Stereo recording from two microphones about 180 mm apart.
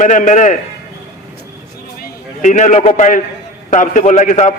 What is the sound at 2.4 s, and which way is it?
A man's voice, 45° left (ahead or behind).